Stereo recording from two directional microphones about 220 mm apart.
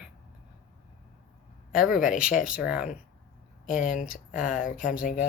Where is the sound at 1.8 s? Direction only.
5° right (ahead or behind).